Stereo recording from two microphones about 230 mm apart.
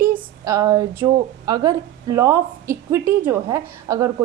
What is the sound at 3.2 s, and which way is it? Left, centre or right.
Speech, centre.